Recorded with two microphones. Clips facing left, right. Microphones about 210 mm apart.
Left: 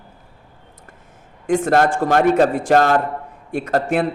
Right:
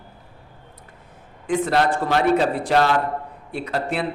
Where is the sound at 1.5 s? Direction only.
45° left (ahead or behind).